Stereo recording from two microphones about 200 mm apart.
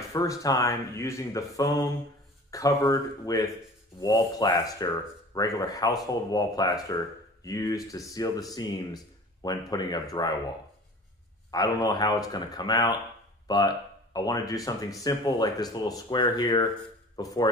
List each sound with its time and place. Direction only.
0.1 s speech: 15° left (ahead or behind)
11.5 s speech: 20° left (ahead or behind)